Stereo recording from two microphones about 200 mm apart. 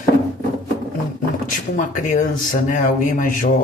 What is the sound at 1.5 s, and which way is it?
Speech, 40° left (ahead or behind).